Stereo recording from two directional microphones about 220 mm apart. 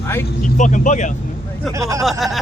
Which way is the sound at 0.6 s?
35° left (ahead or behind).